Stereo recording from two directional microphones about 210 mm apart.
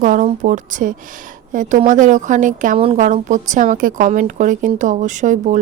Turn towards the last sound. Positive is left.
turn(degrees=-35)  # may be behind; listen again after turning